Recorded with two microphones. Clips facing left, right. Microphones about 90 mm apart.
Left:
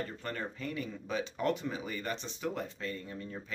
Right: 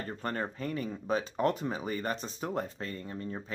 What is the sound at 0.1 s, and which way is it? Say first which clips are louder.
Speech: right 4 dB; 40° right (ahead or behind).